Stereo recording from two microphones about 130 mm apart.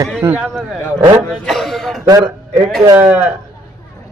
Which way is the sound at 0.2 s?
15° right (ahead or behind).